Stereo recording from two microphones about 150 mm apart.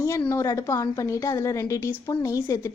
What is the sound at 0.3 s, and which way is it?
A woman's voice, 20° left (ahead or behind).